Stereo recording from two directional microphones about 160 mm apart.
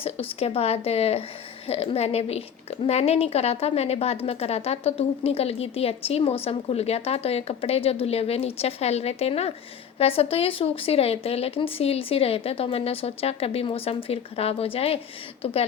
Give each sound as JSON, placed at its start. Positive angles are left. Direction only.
{"t": 0.0, "sound": "a woman's voice", "side_deg": 35}